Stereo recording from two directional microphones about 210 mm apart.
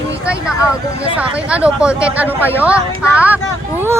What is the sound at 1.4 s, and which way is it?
Speech, 5° right (ahead or behind).